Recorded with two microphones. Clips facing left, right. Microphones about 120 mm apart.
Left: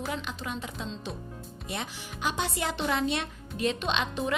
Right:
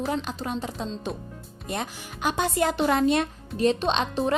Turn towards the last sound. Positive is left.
turn(degrees=-35)  # may be behind; listen again after turning